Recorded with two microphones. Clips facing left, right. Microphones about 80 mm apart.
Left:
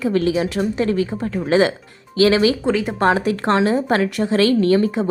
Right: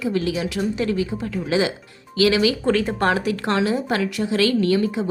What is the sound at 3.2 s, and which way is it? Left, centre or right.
A woman's voice, left.